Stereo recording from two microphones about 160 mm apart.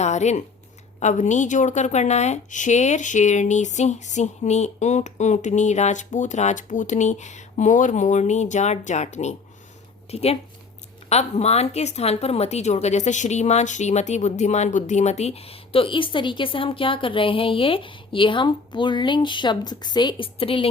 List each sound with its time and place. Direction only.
0.0 s a woman's voice: 45° left (ahead or behind)